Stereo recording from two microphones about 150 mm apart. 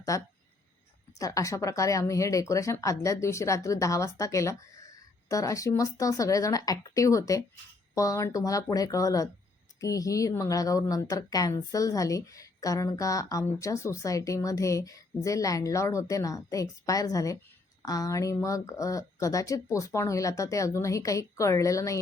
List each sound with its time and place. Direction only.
0.1 s a woman's voice: 20° left (ahead or behind)